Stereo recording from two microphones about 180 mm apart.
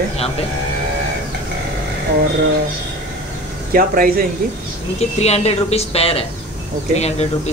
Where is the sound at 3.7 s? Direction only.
50° right (ahead or behind).